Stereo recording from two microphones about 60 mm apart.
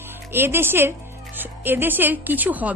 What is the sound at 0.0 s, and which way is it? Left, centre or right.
A woman's voice, right.